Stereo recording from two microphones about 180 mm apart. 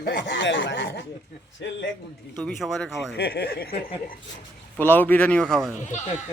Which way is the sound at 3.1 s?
65° left (ahead or behind).